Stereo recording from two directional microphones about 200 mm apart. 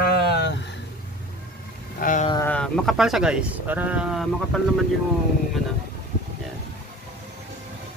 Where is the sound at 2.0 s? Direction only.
40° left (ahead or behind).